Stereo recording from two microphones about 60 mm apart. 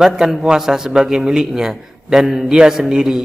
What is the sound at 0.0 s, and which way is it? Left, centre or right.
A man's voice, centre.